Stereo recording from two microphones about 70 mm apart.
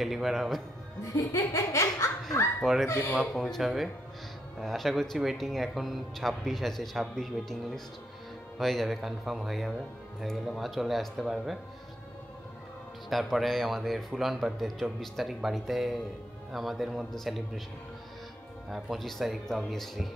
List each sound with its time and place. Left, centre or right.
0.0 s speech: centre
1.0 s laughter: left
2.6 s speech: centre
13.1 s speech: centre
18.7 s speech: centre